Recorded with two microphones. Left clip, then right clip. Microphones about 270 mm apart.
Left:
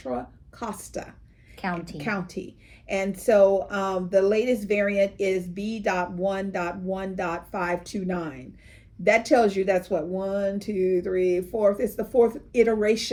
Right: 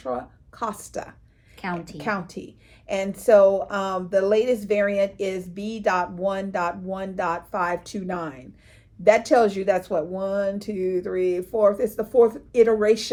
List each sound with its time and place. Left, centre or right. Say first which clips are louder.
0.0 s speech: right 2 dB; centre
1.6 s a woman's voice: even; centre
2.0 s a woman's voice: right 2 dB; centre